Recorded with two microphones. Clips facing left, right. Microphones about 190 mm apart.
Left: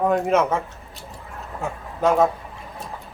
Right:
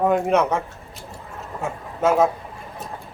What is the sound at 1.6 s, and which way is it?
Vehicle, centre (ahead or behind).